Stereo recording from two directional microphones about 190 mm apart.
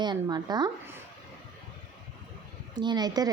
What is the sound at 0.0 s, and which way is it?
Speech, 20° right (ahead or behind).